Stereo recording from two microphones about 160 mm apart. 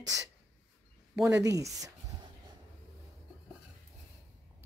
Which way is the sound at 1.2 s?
20° right (ahead or behind).